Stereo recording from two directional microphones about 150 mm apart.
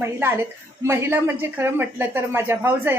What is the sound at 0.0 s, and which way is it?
A woman's voice, 15° right (ahead or behind).